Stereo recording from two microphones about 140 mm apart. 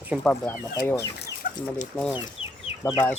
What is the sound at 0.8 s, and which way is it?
Speech, 20° left (ahead or behind).